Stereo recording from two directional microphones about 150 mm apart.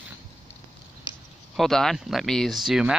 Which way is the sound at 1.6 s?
5° left (ahead or behind).